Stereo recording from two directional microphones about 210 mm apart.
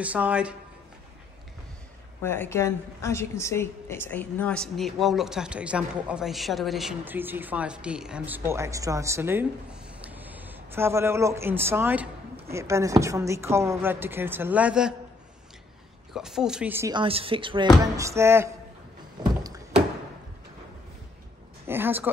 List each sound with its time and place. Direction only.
0.0 s a woman's voice: 5° right (ahead or behind)
2.2 s a woman's voice: 10° left (ahead or behind)
16.1 s a woman's voice: centre (ahead or behind)
16.9 s a woman's voice: 25° right (ahead or behind)
17.9 s a woman's voice: 15° right (ahead or behind)
21.6 s speech: 10° right (ahead or behind)